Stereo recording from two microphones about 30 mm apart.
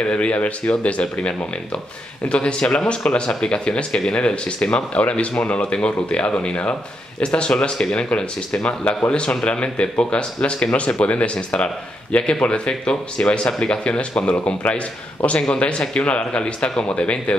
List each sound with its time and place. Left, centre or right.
0.0 s speech: left
2.2 s speech: left
2.6 s speech: left
2.9 s speech: left
7.2 s speech: left
14.3 s speech: left
15.2 s speech: left